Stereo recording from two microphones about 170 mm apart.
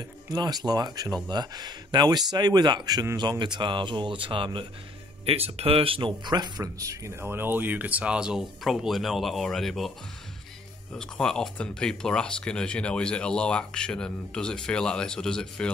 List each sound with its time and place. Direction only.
0.3 s speech: 25° right (ahead or behind); by 15.7 s 5° left (ahead or behind)